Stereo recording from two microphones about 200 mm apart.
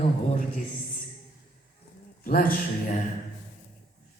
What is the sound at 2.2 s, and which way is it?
Speech, 45° left (ahead or behind).